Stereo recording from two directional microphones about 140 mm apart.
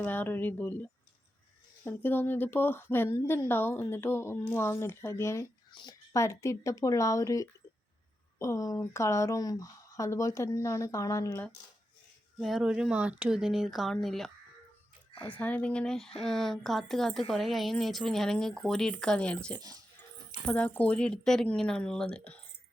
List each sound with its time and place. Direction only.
0.0 s a woman's voice: 15° left (ahead or behind)
12.4 s speech: centre (ahead or behind)
19.5 s speech: 30° right (ahead or behind)
20.4 s a woman's voice: 10° left (ahead or behind)